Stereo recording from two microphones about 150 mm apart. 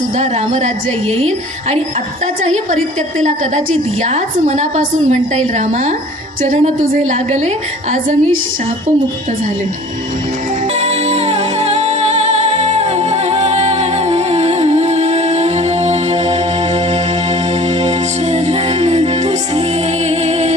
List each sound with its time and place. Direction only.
0.2 s a woman's voice: 50° right (ahead or behind)
2.2 s a woman's voice: 55° right (ahead or behind)
4.0 s a woman's voice: 50° right (ahead or behind)
6.4 s a woman's voice: 60° right (ahead or behind)
10.8 s music: 45° right (ahead or behind)
17.8 s music: 45° right (ahead or behind)
20.1 s music: 45° right (ahead or behind)